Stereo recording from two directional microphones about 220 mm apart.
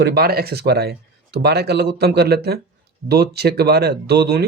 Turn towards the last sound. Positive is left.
turn(degrees=-50)  # may be behind; listen again after turning